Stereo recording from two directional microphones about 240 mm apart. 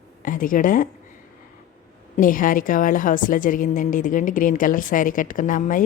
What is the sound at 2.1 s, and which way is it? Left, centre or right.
A woman's voice, left.